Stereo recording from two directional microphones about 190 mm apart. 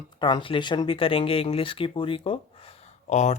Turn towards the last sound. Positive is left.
turn(degrees=35)  # may be behind; listen again after turning